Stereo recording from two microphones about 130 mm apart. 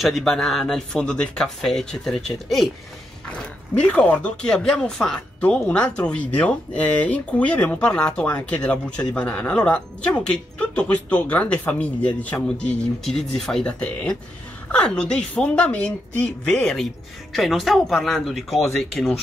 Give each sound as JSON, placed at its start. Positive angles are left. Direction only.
{"t": 0.0, "sound": "speech", "side_deg": 0}
{"t": 3.7, "sound": "speech", "side_deg": 10}